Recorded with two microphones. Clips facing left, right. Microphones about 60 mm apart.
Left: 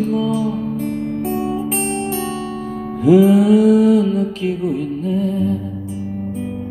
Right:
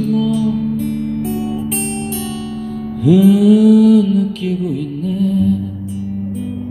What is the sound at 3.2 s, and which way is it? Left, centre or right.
Music, left.